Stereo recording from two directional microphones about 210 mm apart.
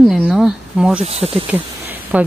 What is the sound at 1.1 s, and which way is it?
Speech, 30° right (ahead or behind).